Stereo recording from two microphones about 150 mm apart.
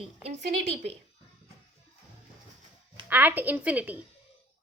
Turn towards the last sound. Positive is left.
turn(degrees=-10)  # may be behind; listen again after turning